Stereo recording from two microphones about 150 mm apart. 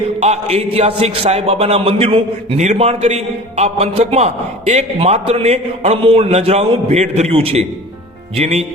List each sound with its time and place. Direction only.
0.2 s a man's voice: 45° right (ahead or behind)